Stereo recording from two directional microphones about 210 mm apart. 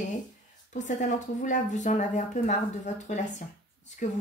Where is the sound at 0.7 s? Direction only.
35° left (ahead or behind).